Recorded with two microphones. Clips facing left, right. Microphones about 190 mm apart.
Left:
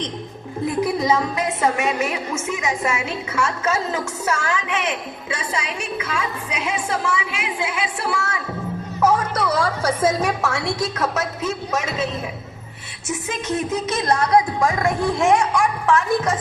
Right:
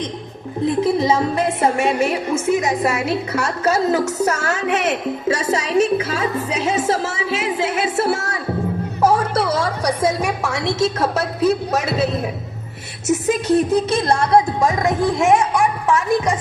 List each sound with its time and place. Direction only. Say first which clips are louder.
0.6 s a woman's voice: right 4 dB; 25° right (ahead or behind)